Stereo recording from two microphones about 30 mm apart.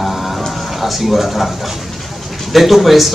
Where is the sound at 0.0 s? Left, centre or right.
Centre.